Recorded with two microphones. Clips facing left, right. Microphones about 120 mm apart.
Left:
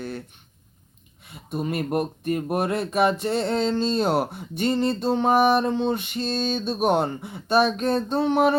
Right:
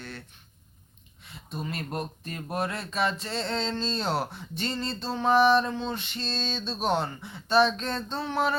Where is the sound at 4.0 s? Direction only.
50° left (ahead or behind).